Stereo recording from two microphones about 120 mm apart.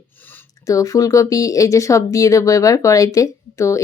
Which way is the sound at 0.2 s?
15° left (ahead or behind).